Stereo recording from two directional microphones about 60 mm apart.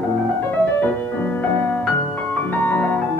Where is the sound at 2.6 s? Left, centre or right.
Left.